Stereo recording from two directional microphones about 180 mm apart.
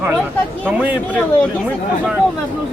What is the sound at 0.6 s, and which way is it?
Speech, 10° right (ahead or behind).